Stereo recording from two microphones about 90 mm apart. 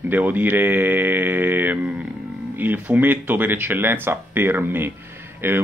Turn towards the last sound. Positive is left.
turn(degrees=-20)  # may be behind; listen again after turning